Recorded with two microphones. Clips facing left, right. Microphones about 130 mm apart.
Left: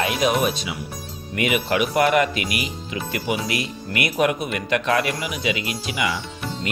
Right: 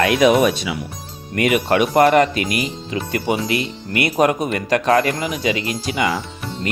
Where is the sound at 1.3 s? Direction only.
40° right (ahead or behind).